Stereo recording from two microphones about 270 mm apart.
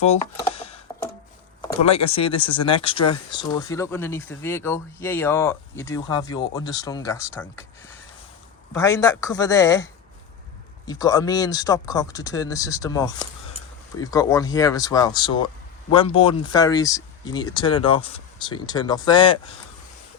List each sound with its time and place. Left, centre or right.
0.5 s a sound: left
1.8 s speech: left
8.7 s speech: centre